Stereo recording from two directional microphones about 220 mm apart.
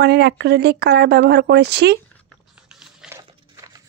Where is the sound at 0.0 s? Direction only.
50° right (ahead or behind).